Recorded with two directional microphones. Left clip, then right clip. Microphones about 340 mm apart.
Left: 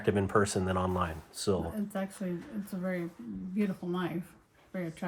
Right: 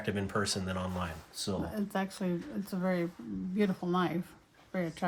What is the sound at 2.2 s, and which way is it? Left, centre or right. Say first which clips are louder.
Speech: right 2 dB; centre.